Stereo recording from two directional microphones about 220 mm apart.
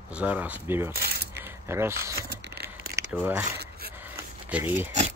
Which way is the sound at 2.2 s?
50° right (ahead or behind).